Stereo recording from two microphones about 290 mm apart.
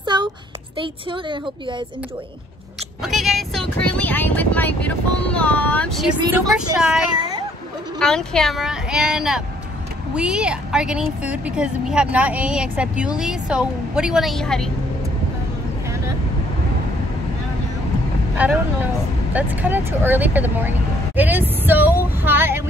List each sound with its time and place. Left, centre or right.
0.0 s a sound: centre
0.7 s speech: centre
3.0 s a woman's voice: centre
18.4 s speech: centre